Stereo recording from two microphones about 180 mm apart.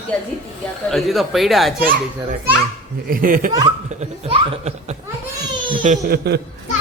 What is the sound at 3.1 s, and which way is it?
Speech, 50° right (ahead or behind).